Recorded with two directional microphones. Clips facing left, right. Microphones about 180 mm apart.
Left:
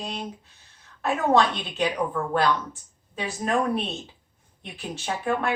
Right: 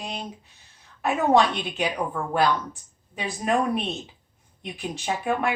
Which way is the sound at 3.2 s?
15° right (ahead or behind).